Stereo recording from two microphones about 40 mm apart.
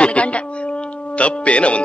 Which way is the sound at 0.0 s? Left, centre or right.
Left.